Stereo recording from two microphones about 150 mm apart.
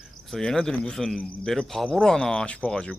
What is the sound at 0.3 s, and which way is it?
Speech, centre (ahead or behind).